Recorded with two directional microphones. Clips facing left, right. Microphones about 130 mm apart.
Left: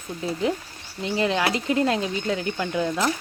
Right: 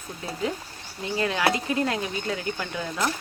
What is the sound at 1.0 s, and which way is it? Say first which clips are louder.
Speech: left 2 dB; 20° left (ahead or behind).